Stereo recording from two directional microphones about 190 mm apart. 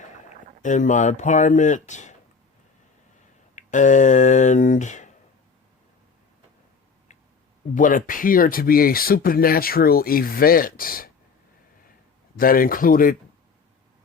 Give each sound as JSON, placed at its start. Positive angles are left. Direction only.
{"t": 0.3, "sound": "speech", "side_deg": 40}
{"t": 3.5, "sound": "speech", "side_deg": 40}
{"t": 7.8, "sound": "speech", "side_deg": 45}
{"t": 12.4, "sound": "speech", "side_deg": 50}